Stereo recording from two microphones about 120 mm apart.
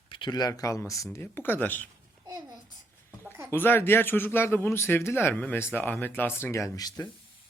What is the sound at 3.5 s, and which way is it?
Speech, 20° left (ahead or behind).